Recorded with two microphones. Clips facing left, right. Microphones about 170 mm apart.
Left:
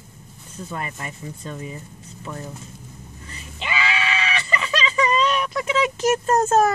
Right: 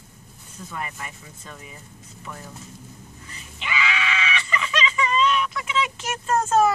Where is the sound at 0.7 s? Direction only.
35° left (ahead or behind).